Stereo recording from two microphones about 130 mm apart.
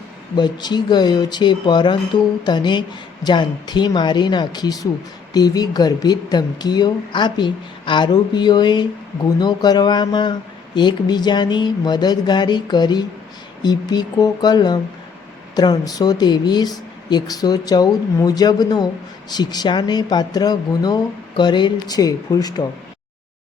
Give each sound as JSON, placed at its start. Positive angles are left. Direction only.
{"t": 0.3, "sound": "speech", "side_deg": 35}